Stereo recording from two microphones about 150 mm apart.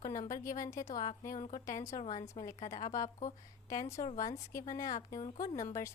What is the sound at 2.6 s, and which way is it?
Speech, 55° left (ahead or behind).